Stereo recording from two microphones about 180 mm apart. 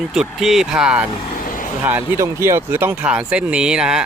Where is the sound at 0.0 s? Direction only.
Centre (ahead or behind).